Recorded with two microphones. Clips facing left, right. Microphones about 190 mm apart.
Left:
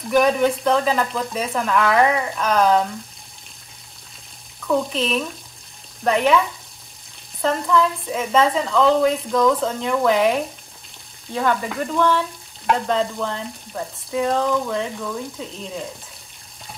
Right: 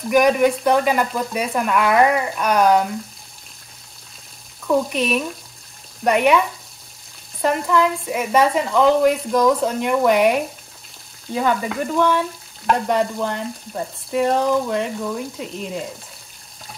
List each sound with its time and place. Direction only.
0.1 s frying: 10° right (ahead or behind)
4.6 s frying: 10° right (ahead or behind)
7.6 s frying: 10° right (ahead or behind)
11.3 s frying: 10° right (ahead or behind)